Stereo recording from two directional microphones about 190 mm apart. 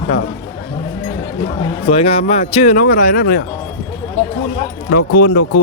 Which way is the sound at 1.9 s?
30° left (ahead or behind).